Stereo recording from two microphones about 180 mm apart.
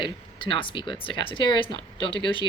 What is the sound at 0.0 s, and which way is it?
Speech, 25° left (ahead or behind).